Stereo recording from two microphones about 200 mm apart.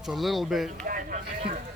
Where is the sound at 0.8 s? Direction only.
40° right (ahead or behind).